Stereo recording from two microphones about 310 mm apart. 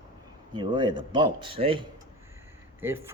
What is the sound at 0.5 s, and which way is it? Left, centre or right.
Speech, centre.